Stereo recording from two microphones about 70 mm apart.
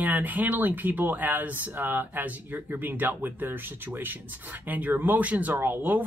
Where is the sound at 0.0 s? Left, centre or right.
Right.